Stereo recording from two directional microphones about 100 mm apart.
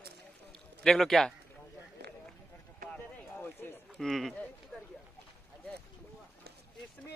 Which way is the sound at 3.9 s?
5° left (ahead or behind).